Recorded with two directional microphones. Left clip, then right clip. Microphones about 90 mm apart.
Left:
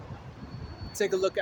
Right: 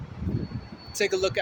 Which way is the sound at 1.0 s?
Centre (ahead or behind).